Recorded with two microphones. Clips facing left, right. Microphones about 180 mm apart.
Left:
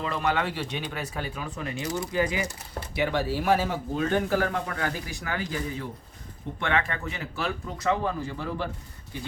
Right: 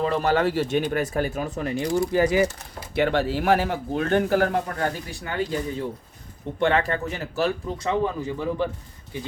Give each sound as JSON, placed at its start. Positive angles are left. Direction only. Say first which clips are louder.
{"t": 0.0, "sound": "speech", "louder": "right 6 dB", "side_deg": -35}
{"t": 2.9, "sound": "speech", "louder": "right 5 dB", "side_deg": -60}
{"t": 4.8, "sound": "speech", "louder": "right 4 dB", "side_deg": -30}
{"t": 6.6, "sound": "speech", "louder": "right 6 dB", "side_deg": -35}
{"t": 7.8, "sound": "a man's voice", "louder": "right 1 dB", "side_deg": -20}